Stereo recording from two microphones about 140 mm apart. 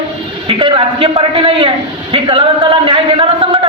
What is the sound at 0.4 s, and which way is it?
A man's voice, 40° right (ahead or behind).